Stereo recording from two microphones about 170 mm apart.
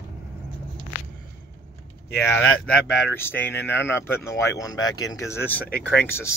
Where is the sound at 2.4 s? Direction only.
10° left (ahead or behind).